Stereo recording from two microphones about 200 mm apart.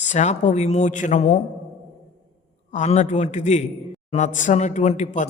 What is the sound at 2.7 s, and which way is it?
A man's voice, 35° left (ahead or behind).